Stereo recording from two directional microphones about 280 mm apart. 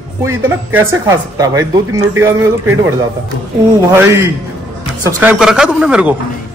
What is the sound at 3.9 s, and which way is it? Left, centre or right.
A man's voice, centre.